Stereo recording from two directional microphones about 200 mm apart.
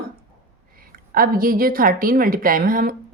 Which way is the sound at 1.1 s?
45° right (ahead or behind).